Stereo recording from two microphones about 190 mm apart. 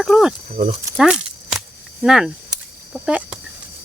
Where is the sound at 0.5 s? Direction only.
35° right (ahead or behind).